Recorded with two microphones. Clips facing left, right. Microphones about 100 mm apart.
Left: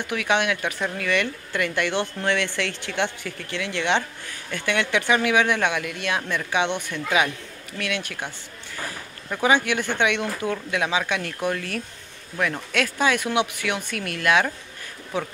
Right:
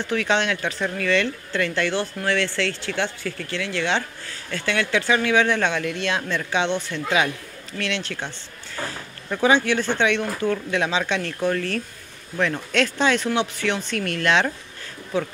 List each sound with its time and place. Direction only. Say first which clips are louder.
0.0 s speech: right 1 dB; 15° left (ahead or behind)
9.4 s speech: right 2 dB; 15° left (ahead or behind)